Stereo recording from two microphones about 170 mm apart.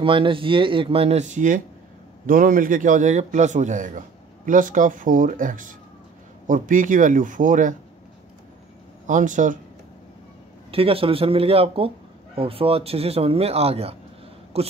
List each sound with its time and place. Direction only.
0.0 s a man's voice: 30° right (ahead or behind); by 7.7 s 50° right (ahead or behind)
9.0 s a man's voice: 50° right (ahead or behind)
10.7 s speech: 35° right (ahead or behind)